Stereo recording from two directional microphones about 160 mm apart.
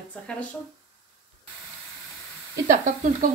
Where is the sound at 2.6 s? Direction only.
55° right (ahead or behind).